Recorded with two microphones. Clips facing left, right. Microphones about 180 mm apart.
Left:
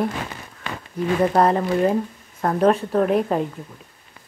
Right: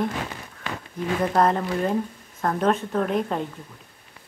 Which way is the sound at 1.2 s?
5° left (ahead or behind).